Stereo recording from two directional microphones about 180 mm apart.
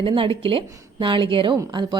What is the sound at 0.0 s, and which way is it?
A woman's voice, 30° right (ahead or behind).